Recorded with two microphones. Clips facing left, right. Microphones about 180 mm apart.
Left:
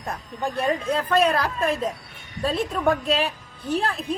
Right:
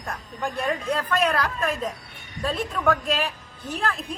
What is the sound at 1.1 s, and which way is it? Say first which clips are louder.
Speech: left 4 dB; 35° left (ahead or behind).